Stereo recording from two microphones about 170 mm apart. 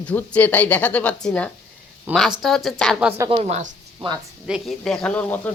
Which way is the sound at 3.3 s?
40° right (ahead or behind).